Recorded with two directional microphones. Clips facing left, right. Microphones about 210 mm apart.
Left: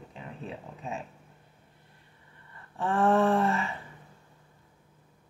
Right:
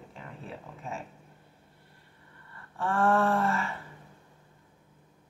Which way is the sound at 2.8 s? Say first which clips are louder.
Left 2 dB; 20° left (ahead or behind).